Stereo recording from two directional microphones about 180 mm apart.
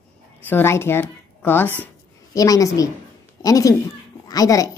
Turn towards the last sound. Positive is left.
turn(degrees=20)  # may be behind; listen again after turning